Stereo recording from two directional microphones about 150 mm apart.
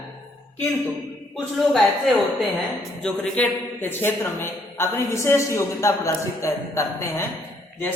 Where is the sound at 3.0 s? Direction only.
5° left (ahead or behind).